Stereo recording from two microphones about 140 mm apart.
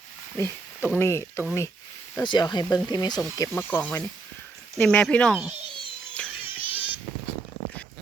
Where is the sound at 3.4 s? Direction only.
15° left (ahead or behind).